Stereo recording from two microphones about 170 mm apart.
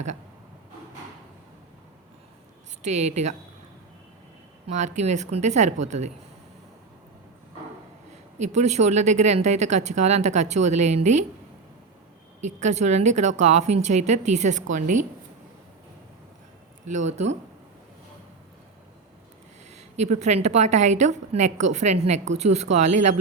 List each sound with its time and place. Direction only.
2.8 s a woman's voice: 40° right (ahead or behind)
4.7 s a woman's voice: 45° right (ahead or behind)
8.4 s a woman's voice: 40° right (ahead or behind)
12.5 s a woman's voice: 45° right (ahead or behind)
16.8 s a woman's voice: 45° right (ahead or behind)
19.7 s a woman's voice: 40° right (ahead or behind)